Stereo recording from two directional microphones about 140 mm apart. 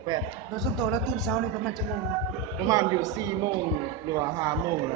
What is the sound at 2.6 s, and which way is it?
Speech, 25° right (ahead or behind).